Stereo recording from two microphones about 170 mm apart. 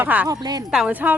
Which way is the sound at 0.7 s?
5° right (ahead or behind).